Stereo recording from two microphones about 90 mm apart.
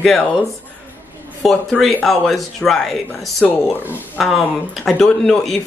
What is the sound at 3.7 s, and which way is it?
Speech, 20° left (ahead or behind).